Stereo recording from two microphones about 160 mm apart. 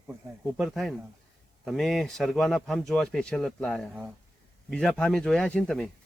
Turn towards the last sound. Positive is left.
turn(degrees=5)  # may be behind; listen again after turning